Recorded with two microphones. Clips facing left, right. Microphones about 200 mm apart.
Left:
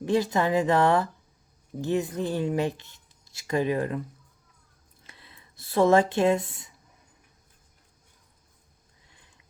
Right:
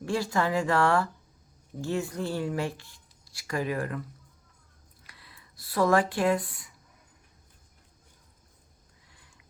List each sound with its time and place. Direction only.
0.0 s speech: 20° left (ahead or behind)
5.0 s speech: 25° left (ahead or behind)